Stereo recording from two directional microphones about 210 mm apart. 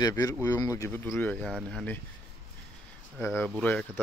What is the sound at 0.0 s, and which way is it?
Speech, 15° left (ahead or behind).